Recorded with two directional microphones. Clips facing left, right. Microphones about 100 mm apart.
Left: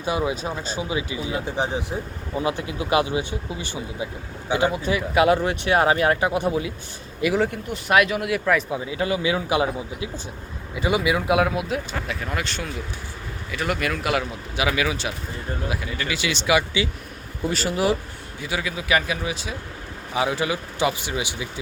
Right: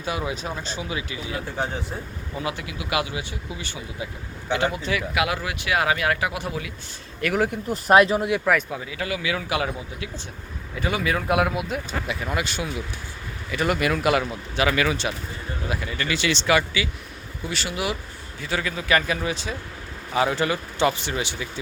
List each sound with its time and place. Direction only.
0.0 s speech: 20° left (ahead or behind)
2.4 s a man's voice: 25° left (ahead or behind)
5.1 s speech: 35° left (ahead or behind)
7.2 s a man's voice: 10° left (ahead or behind)
7.7 s speech: 35° right (ahead or behind)
8.7 s a man's voice: 20° left (ahead or behind)
11.3 s speech: centre (ahead or behind)
17.4 s speech: 40° left (ahead or behind)
18.4 s a man's voice: 10° left (ahead or behind)